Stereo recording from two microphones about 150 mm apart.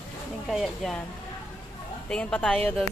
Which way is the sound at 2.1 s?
5° left (ahead or behind).